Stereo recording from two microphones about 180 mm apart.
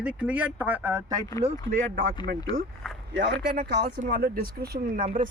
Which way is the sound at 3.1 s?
75° right (ahead or behind).